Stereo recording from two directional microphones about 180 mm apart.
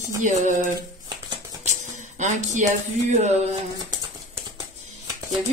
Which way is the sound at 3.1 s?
40° right (ahead or behind).